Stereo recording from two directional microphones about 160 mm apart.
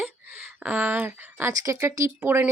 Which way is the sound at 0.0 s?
10° right (ahead or behind).